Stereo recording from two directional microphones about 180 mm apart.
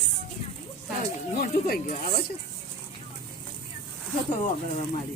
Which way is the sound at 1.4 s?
55° left (ahead or behind).